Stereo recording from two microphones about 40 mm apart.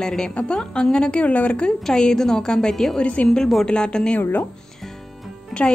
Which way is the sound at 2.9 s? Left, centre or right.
Left.